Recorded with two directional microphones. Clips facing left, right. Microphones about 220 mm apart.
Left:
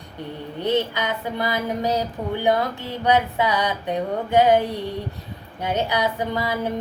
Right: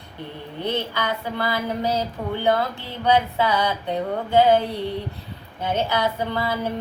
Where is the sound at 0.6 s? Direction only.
15° left (ahead or behind).